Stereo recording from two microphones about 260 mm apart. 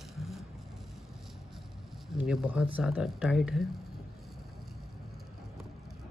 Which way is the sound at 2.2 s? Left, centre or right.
Centre.